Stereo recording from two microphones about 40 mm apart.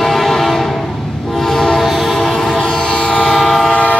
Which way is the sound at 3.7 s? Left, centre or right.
Left.